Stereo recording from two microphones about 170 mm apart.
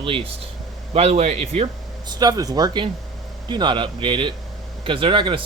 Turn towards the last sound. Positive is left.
turn(degrees=-30)  # may be behind; listen again after turning